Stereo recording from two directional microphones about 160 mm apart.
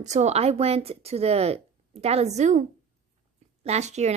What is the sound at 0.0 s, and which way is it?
Speech, 45° right (ahead or behind).